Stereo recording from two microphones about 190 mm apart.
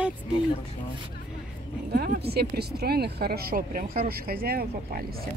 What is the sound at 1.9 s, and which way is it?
Speech, 55° right (ahead or behind).